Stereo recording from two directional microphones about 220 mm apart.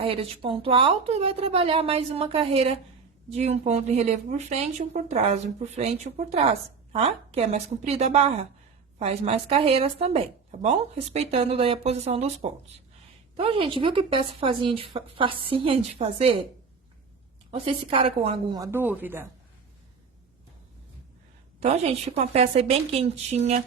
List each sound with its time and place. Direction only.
0.0 s speech: 25° right (ahead or behind)
17.5 s a woman's voice: 25° right (ahead or behind); by 19.3 s 10° right (ahead or behind)
21.6 s speech: 25° right (ahead or behind)